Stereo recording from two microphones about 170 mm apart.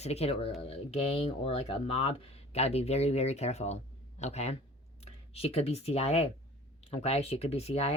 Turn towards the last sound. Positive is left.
turn(degrees=40)  # may be behind; listen again after turning